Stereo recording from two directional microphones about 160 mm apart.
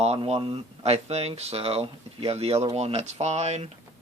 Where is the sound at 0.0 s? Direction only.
40° right (ahead or behind).